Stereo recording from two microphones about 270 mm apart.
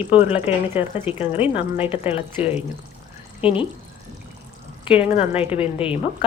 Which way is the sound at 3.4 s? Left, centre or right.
Centre.